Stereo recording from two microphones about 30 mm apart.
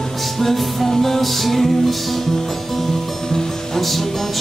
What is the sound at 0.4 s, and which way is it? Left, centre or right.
Music, centre.